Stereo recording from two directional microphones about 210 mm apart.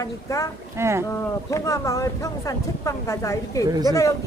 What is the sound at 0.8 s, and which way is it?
Speech, 10° right (ahead or behind).